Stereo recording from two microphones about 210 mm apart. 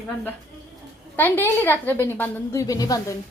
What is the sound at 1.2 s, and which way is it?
A woman's voice, 10° left (ahead or behind).